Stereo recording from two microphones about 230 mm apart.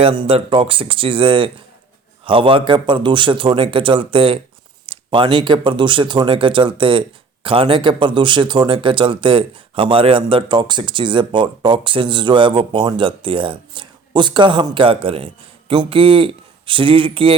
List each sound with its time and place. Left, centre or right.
0.0 s speech: right